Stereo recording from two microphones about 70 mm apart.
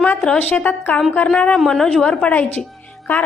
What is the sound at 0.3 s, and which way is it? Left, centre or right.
A woman's voice, centre.